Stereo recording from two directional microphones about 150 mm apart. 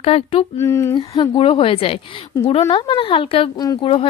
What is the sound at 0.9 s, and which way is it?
Speech, 30° left (ahead or behind).